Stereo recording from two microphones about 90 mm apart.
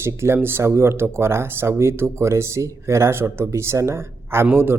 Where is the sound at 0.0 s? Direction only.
30° right (ahead or behind).